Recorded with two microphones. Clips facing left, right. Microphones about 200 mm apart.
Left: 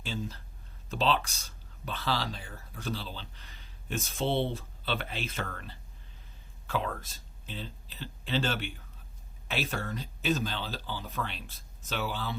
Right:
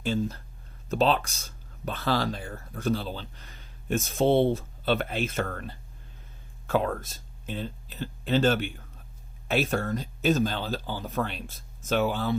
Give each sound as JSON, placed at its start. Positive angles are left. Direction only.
{"t": 0.0, "sound": "speech", "side_deg": -50}